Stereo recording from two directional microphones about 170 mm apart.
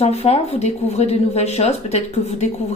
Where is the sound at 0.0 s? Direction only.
40° left (ahead or behind).